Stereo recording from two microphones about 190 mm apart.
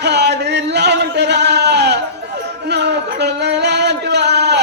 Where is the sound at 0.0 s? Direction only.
60° right (ahead or behind).